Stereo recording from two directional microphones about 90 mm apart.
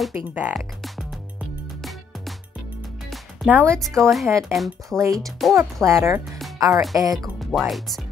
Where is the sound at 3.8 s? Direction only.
5° left (ahead or behind).